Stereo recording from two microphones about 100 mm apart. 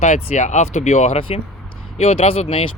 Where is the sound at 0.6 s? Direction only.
90° left.